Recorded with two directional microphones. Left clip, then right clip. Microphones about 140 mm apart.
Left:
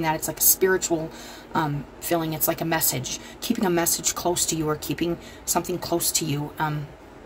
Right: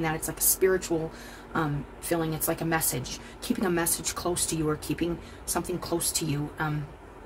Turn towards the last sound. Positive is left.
turn(degrees=25)  # may be behind; listen again after turning